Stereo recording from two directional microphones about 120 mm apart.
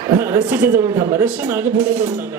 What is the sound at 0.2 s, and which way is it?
Speech, 20° right (ahead or behind).